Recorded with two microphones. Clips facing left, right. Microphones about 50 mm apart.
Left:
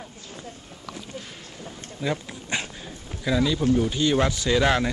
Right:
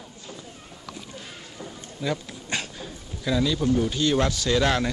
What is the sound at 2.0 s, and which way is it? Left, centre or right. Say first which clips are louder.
Dog: left 1 dB; centre.